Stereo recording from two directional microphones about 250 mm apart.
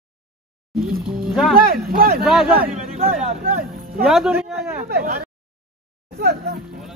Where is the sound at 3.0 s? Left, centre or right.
Right.